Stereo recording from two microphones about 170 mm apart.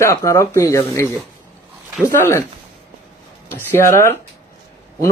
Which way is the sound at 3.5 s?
15° left (ahead or behind).